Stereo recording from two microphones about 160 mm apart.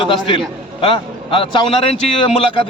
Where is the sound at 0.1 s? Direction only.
30° left (ahead or behind).